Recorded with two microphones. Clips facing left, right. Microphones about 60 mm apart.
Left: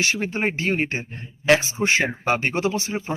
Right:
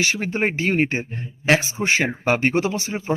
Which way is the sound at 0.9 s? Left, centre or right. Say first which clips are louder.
Right 3 dB; right.